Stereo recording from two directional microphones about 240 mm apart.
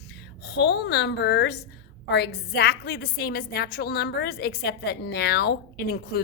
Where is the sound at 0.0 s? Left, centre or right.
Left.